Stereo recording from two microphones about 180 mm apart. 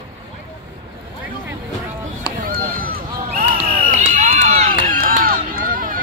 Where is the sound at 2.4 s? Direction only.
50° right (ahead or behind).